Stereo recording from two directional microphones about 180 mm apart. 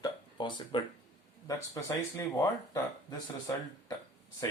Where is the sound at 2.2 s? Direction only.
20° left (ahead or behind).